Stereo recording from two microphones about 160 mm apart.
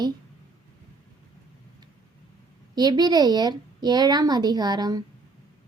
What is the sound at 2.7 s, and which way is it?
A woman's voice, 25° right (ahead or behind).